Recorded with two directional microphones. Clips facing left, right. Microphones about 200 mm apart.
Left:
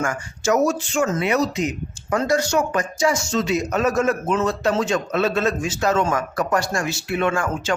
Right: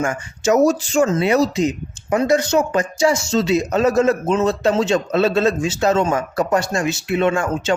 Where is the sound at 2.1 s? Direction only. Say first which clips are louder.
Right 4 dB; 20° right (ahead or behind).